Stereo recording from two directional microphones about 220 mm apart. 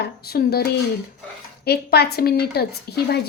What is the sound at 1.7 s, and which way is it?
A woman's voice, 45° left (ahead or behind).